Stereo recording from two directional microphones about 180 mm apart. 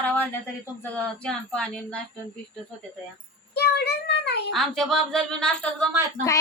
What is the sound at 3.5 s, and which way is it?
Child singing, 65° left (ahead or behind).